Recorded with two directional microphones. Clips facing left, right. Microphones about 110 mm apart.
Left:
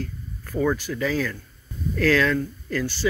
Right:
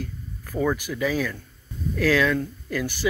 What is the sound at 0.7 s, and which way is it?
Speech, 15° right (ahead or behind).